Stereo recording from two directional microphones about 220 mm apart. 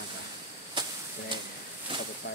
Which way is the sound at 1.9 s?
20° right (ahead or behind).